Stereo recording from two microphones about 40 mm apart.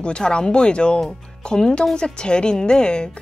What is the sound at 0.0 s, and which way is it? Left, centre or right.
Speech, left.